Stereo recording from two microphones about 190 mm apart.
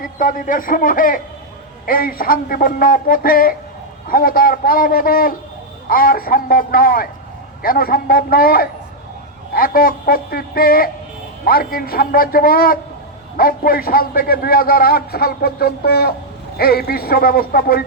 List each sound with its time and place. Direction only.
0.0 s a man's voice: 45° left (ahead or behind)